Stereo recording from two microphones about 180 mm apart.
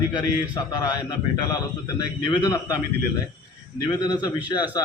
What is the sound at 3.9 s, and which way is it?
Speech, 25° left (ahead or behind).